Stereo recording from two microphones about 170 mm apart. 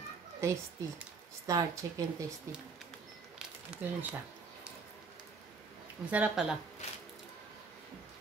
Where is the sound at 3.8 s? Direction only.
10° right (ahead or behind).